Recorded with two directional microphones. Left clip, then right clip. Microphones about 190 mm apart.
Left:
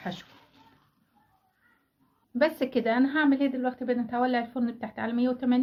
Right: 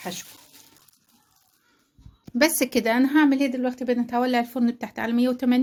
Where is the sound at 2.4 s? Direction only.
70° right (ahead or behind).